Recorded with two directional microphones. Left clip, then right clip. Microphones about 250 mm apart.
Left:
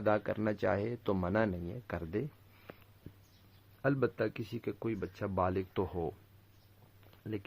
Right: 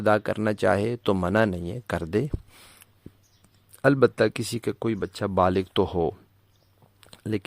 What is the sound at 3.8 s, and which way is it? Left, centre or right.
Speech, right.